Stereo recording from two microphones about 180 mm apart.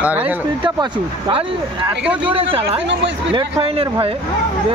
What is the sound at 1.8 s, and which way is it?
Speech, 5° right (ahead or behind).